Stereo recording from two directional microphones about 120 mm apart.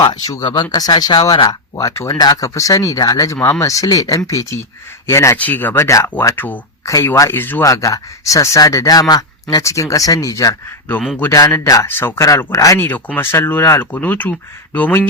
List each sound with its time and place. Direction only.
0.0 s speech: 30° left (ahead or behind)
1.7 s speech: 25° left (ahead or behind)
7.6 s speech: 25° left (ahead or behind)